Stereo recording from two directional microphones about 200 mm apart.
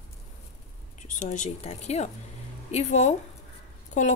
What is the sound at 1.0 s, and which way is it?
A woman's voice, 35° left (ahead or behind).